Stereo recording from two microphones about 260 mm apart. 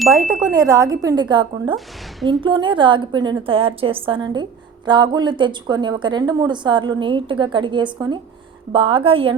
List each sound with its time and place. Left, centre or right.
0.1 s a woman's voice: centre